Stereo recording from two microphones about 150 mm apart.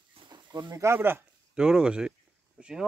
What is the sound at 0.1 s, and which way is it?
Speech, 30° right (ahead or behind).